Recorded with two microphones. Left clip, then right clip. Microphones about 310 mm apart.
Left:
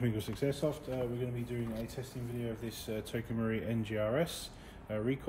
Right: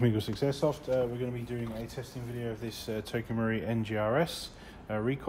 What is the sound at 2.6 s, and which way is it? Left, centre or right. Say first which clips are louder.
Speech: right 3 dB; right.